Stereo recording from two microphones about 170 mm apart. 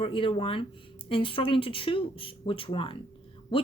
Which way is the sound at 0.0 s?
30° left (ahead or behind).